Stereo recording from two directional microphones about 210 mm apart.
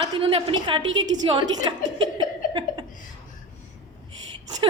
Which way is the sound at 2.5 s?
25° right (ahead or behind).